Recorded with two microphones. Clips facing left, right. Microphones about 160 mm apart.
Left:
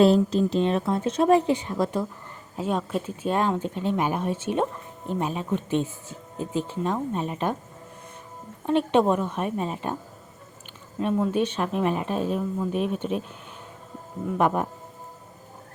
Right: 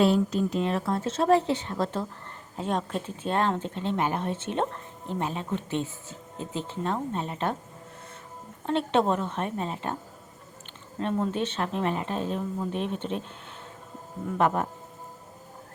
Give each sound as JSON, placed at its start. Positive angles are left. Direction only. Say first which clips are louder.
{"t": 0.0, "sound": "speech", "louder": "left 4 dB", "side_deg": 35}
{"t": 8.6, "sound": "speech", "louder": "left 4 dB", "side_deg": 15}
{"t": 11.0, "sound": "speech", "louder": "left 4 dB", "side_deg": 10}
{"t": 14.3, "sound": "speech", "louder": "left 2 dB", "side_deg": 15}